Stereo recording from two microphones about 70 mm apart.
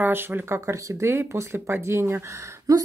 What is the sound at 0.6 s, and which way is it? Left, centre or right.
Speech, right.